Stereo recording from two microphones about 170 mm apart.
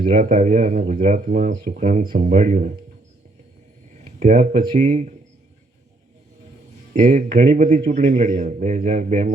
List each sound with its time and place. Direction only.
0.1 s speech: 50° right (ahead or behind)
4.2 s speech: 45° right (ahead or behind)
6.9 s speech: 45° right (ahead or behind)